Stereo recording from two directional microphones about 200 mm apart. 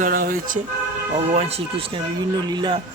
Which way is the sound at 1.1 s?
30° right (ahead or behind).